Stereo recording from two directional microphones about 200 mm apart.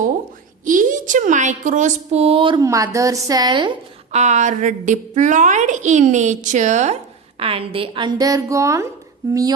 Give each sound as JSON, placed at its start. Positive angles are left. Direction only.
{"t": 0.6, "sound": "a woman's voice", "side_deg": -40}
{"t": 4.2, "sound": "a woman's voice", "side_deg": -35}